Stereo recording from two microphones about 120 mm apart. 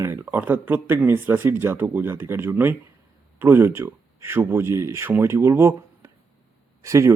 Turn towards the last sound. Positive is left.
turn(degrees=-25)  # may be behind; listen again after turning